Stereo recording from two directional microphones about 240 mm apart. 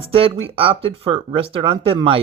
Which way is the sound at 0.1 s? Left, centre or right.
Right.